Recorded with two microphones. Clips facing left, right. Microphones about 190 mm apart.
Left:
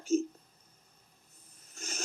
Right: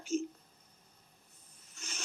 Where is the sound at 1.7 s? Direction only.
45° left (ahead or behind).